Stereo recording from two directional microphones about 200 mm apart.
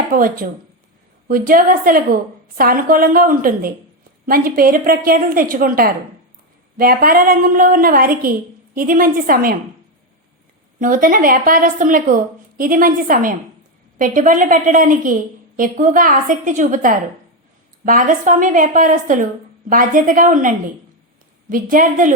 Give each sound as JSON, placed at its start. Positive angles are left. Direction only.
{"t": 0.1, "sound": "a woman's voice", "side_deg": -45}
{"t": 10.8, "sound": "a woman's voice", "side_deg": -40}